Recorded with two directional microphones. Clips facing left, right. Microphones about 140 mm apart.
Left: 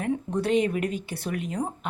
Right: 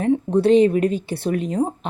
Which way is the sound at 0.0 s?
30° right (ahead or behind).